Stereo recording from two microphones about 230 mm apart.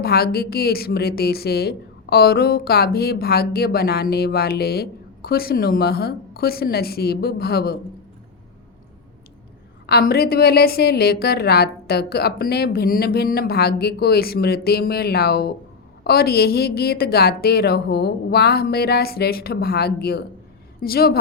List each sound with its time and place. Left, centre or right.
0.0 s a woman's voice: left
9.8 s a woman's voice: left